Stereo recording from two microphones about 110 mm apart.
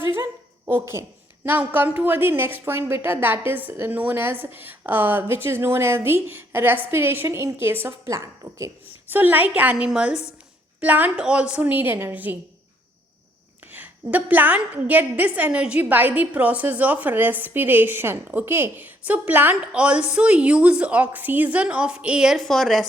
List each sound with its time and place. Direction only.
0.0 s a sound: 25° right (ahead or behind)
0.7 s a woman's voice: 25° right (ahead or behind)
9.0 s a woman's voice: 15° right (ahead or behind)
13.7 s a woman's voice: 15° right (ahead or behind); by 22.9 s centre (ahead or behind)